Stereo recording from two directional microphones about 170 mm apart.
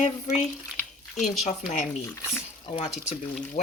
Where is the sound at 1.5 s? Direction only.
45° left (ahead or behind).